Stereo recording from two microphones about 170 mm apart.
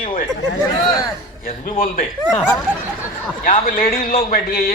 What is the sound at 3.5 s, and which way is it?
A man's voice, 55° left (ahead or behind).